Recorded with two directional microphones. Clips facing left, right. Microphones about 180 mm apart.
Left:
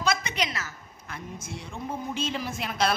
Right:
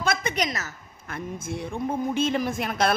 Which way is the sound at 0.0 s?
50° right (ahead or behind).